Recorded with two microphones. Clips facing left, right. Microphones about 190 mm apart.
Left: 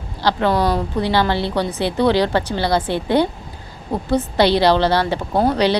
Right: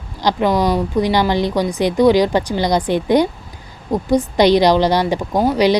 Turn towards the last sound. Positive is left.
turn(degrees=-10)  # may be behind; listen again after turning